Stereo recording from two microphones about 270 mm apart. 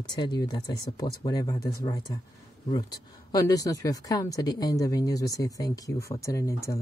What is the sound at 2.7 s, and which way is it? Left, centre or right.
Speech, centre.